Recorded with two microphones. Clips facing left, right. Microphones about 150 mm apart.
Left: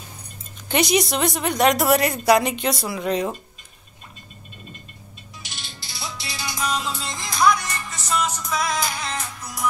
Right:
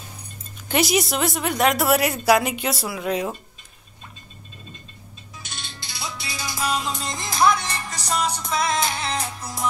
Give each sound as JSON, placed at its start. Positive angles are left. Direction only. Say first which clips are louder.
{"t": 0.7, "sound": "a woman's voice", "louder": "left 1 dB", "side_deg": -5}
{"t": 5.6, "sound": "music", "louder": "right 1 dB", "side_deg": 0}
{"t": 7.3, "sound": "music", "louder": "even", "side_deg": -25}